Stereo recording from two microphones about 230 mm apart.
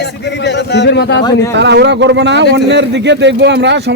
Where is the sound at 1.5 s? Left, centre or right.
Right.